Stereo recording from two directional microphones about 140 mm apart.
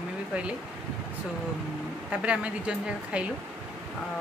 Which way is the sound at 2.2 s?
10° right (ahead or behind).